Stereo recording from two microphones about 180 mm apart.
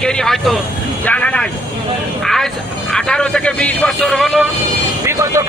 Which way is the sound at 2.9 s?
5° left (ahead or behind).